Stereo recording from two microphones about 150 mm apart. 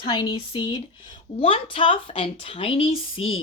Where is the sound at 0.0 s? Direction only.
30° left (ahead or behind).